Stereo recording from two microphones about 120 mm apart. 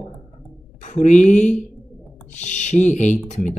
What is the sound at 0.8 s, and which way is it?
Speech, 90° left.